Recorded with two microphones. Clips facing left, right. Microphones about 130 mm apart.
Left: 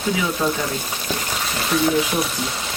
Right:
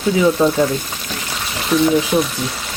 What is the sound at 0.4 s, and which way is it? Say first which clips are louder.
Speech: right 7 dB; 25° right (ahead or behind).